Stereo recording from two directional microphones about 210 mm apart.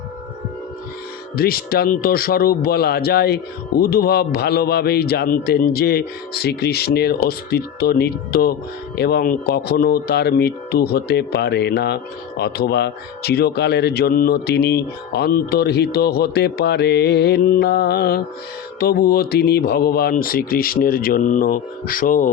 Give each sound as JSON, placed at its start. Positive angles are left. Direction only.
{"t": 1.4, "sound": "speech", "side_deg": 45}